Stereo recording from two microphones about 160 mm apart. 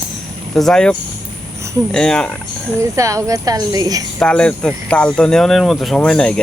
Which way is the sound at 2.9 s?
20° right (ahead or behind).